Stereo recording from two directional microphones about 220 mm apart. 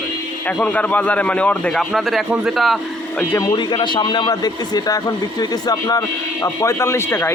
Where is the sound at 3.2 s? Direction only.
10° left (ahead or behind).